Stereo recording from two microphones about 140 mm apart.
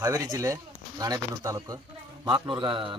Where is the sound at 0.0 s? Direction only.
25° right (ahead or behind).